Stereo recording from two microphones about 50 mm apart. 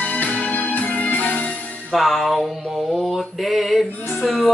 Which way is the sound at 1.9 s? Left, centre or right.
Centre.